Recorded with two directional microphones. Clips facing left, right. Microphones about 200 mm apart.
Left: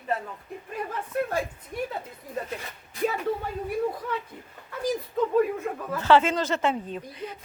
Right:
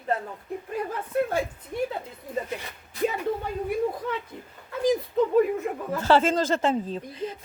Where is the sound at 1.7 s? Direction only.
30° right (ahead or behind).